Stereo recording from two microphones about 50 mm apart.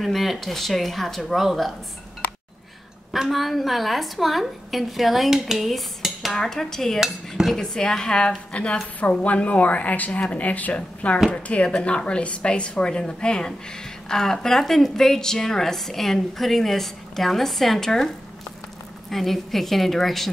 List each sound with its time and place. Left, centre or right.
0.0 s a woman's voice: centre
3.1 s a woman's voice: centre
5.7 s cutlery: centre
6.3 s a woman's voice: centre
7.0 s dishes: centre
7.5 s a woman's voice: centre